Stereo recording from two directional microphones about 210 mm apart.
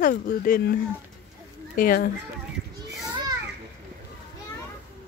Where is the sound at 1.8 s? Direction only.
40° left (ahead or behind).